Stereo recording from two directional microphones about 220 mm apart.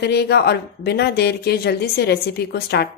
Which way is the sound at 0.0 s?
50° left (ahead or behind).